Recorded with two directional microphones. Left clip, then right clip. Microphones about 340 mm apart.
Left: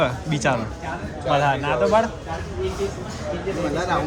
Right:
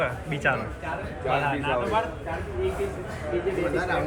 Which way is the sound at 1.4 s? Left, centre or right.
Left.